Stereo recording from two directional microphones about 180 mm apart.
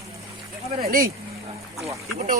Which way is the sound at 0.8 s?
55° right (ahead or behind).